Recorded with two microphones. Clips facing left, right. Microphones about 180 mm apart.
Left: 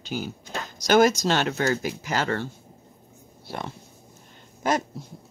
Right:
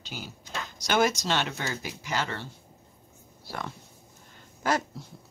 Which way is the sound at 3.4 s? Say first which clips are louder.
Left 3 dB; 25° left (ahead or behind).